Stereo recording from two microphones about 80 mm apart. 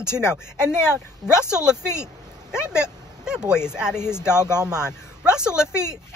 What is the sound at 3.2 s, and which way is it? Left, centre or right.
Speech, centre.